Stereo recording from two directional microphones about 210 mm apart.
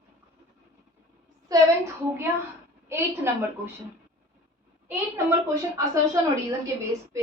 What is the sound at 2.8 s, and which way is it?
Speech, 10° right (ahead or behind).